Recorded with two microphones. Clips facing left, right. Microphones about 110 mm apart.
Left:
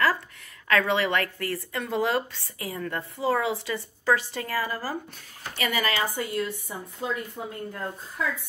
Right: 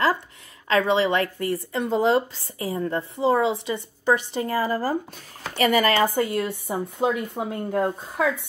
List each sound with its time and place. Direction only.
0.7 s a woman's voice: 20° right (ahead or behind)
5.6 s speech: 40° right (ahead or behind)
6.1 s speech: 60° right (ahead or behind)